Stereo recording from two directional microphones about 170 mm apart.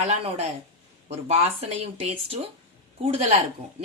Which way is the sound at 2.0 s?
35° right (ahead or behind).